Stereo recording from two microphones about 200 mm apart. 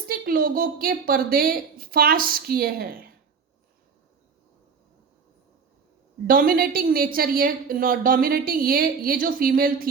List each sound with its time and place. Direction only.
0.1 s a woman's voice: 45° right (ahead or behind)
6.2 s a woman's voice: 45° right (ahead or behind)